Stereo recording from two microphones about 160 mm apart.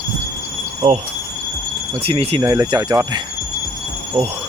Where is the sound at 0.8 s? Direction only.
40° right (ahead or behind).